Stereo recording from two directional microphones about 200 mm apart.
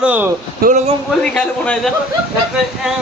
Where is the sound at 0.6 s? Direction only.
45° right (ahead or behind).